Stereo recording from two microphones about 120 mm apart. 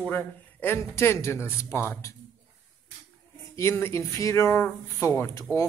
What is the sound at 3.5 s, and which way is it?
A man's voice, 20° left (ahead or behind).